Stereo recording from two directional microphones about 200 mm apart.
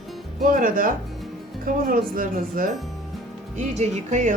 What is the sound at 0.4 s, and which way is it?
Speech, 45° right (ahead or behind).